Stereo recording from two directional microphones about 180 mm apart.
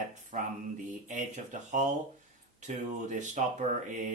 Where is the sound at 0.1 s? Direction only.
40° right (ahead or behind).